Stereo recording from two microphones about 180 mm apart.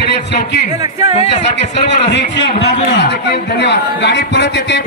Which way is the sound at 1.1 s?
40° left (ahead or behind).